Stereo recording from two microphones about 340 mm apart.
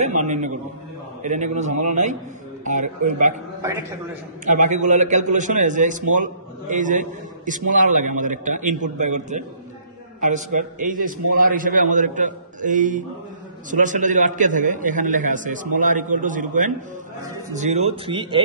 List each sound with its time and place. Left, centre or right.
0.0 s a man's voice: right
3.6 s speech: centre
4.5 s a man's voice: right